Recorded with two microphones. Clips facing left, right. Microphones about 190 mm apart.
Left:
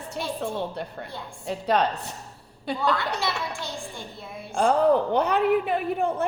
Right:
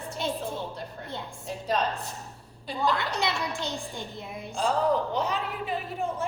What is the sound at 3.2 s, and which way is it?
A child's voice, 20° right (ahead or behind).